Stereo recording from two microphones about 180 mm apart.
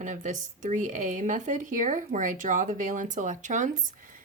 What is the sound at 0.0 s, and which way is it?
Speech, 45° right (ahead or behind).